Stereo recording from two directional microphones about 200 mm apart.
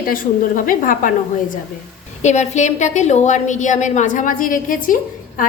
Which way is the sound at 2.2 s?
35° left (ahead or behind).